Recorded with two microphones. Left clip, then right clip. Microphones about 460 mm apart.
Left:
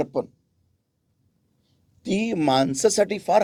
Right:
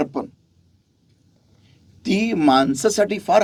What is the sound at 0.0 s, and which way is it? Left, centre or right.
Speech, left.